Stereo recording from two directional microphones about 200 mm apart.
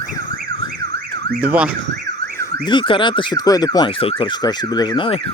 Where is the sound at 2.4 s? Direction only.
20° left (ahead or behind).